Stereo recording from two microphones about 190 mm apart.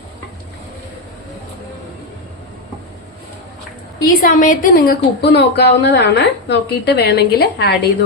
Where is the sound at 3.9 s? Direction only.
50° left (ahead or behind).